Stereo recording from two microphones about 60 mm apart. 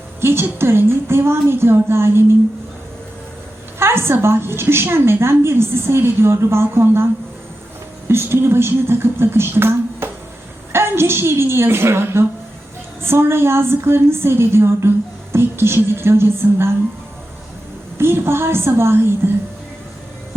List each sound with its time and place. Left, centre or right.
0.2 s a woman's voice: right
3.8 s a woman's voice: right
17.9 s a woman's voice: right